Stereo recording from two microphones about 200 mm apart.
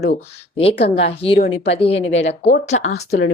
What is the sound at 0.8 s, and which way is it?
Speech, 55° left (ahead or behind).